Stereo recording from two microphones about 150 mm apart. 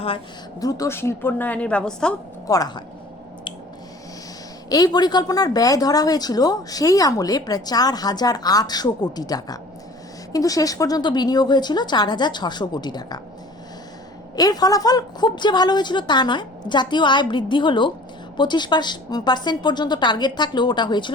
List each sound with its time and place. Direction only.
0.6 s a woman's voice: 25° left (ahead or behind); by 2.1 s 5° left (ahead or behind)
2.5 s a woman's voice: 25° left (ahead or behind)
4.7 s a woman's voice: 25° left (ahead or behind)
14.3 s a woman's voice: 25° left (ahead or behind)